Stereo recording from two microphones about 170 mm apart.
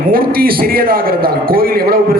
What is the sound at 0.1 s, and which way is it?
A man's voice, 60° right (ahead or behind).